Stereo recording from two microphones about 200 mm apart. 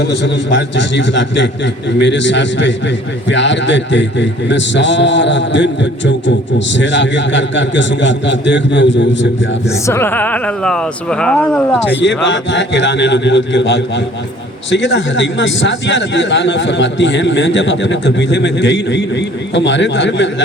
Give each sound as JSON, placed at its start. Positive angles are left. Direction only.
{"t": 0.0, "sound": "a man's voice", "side_deg": 60}
{"t": 9.8, "sound": "speech", "side_deg": 10}
{"t": 12.0, "sound": "a man's voice", "side_deg": 65}